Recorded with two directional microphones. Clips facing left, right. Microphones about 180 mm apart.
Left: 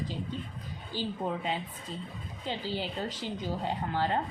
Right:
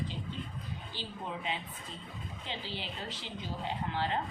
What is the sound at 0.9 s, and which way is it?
A woman's voice, 40° left (ahead or behind).